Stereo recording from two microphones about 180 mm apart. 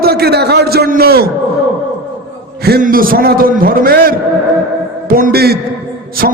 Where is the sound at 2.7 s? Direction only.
55° right (ahead or behind).